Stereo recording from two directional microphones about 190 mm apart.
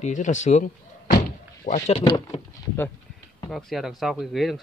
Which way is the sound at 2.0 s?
25° left (ahead or behind).